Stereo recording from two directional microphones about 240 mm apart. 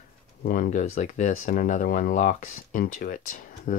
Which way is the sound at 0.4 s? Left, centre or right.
Left.